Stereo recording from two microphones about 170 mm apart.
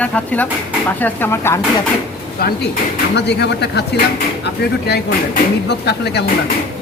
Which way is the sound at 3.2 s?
85° left.